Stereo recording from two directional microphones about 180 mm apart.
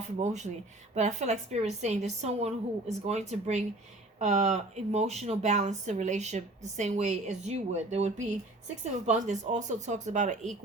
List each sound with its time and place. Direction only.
0.2 s speech: 40° right (ahead or behind)